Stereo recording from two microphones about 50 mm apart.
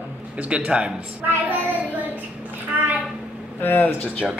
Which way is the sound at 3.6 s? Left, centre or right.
Left.